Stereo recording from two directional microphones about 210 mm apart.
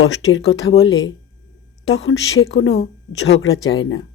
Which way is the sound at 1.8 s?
60° left (ahead or behind).